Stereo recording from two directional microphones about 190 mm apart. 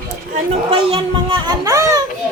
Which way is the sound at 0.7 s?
25° right (ahead or behind).